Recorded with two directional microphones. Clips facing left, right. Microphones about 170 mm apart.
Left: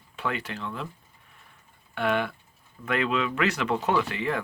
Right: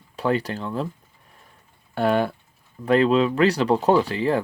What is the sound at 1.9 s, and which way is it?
Speech, 35° right (ahead or behind).